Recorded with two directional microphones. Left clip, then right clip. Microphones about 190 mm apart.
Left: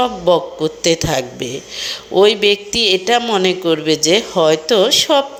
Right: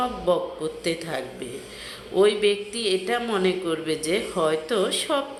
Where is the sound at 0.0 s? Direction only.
30° left (ahead or behind).